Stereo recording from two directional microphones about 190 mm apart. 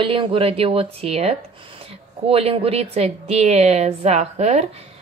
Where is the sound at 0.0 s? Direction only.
30° right (ahead or behind).